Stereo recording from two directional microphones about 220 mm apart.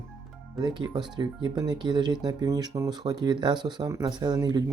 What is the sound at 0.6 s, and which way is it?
Speech, 20° right (ahead or behind).